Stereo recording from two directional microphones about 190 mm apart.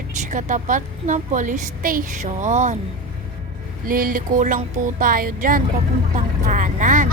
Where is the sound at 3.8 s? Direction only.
45° right (ahead or behind).